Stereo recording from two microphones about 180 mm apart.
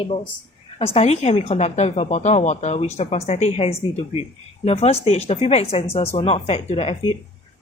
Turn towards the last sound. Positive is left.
turn(degrees=35)  # may be behind; listen again after turning